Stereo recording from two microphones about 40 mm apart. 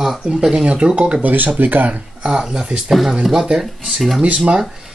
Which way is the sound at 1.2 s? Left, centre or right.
Right.